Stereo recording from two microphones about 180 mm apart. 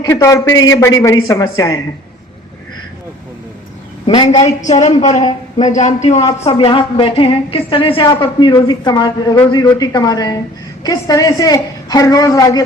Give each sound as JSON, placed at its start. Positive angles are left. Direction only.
{"t": 0.1, "sound": "a woman's voice", "side_deg": 15}
{"t": 4.0, "sound": "a woman's voice", "side_deg": 25}
{"t": 4.6, "sound": "a man's voice", "side_deg": 40}